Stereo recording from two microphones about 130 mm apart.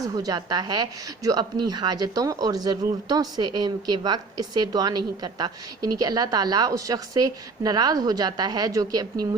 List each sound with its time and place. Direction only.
0.2 s a woman's voice: 30° right (ahead or behind)